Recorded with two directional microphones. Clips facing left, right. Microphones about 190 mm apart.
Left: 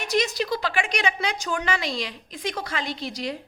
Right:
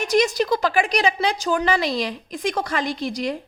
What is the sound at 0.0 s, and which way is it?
A woman's voice, 45° right (ahead or behind).